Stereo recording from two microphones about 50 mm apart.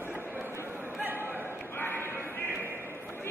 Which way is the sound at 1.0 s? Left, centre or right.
Right.